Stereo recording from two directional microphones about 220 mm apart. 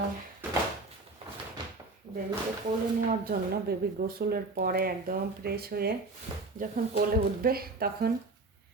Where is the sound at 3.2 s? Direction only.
40° right (ahead or behind).